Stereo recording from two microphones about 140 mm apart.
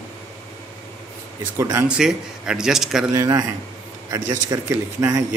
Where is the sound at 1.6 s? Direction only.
20° right (ahead or behind).